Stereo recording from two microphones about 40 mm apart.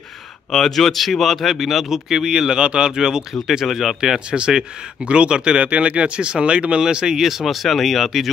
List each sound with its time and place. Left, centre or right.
0.5 s speech: centre
4.3 s speech: right
7.2 s speech: centre